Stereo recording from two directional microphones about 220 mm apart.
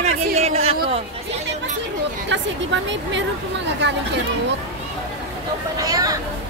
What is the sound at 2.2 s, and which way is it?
Speech, 55° right (ahead or behind).